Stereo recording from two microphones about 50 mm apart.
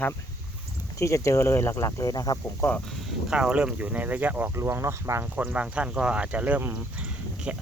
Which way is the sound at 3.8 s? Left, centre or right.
Right.